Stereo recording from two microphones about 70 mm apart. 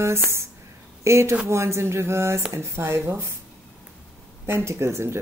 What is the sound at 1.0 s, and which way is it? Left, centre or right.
A woman's voice, right.